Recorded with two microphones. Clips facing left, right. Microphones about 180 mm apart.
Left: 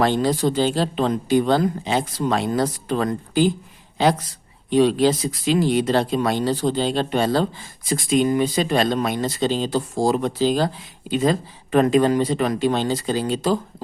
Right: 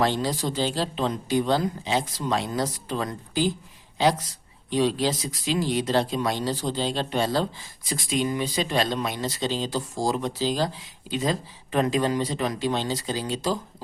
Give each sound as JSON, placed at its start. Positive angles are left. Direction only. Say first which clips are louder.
{"t": 0.0, "sound": "speech", "louder": "left 6 dB", "side_deg": 55}